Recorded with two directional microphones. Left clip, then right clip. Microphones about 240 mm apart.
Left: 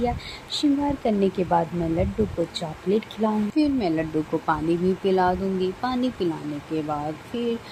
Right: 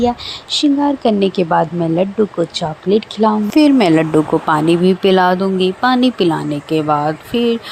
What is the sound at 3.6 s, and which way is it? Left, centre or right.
Speech, right.